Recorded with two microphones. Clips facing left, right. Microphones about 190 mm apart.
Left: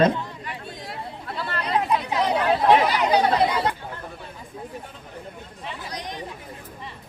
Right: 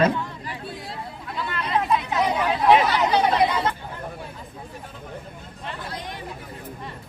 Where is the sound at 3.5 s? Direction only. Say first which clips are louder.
Even; 15° left (ahead or behind).